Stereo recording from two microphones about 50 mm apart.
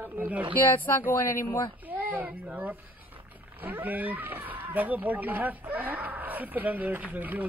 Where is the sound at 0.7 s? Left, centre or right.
Left.